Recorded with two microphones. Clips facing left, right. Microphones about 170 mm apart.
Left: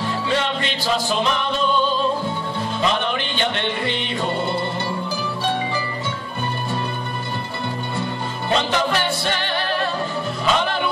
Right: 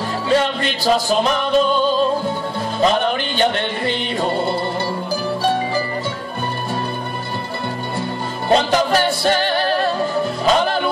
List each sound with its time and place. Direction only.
0.3 s music: 40° right (ahead or behind)
8.5 s music: 40° right (ahead or behind)